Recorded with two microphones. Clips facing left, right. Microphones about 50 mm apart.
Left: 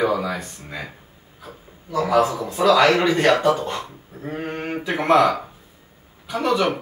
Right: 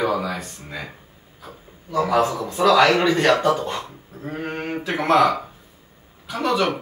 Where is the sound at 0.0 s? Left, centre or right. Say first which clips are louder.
Left 1 dB; centre.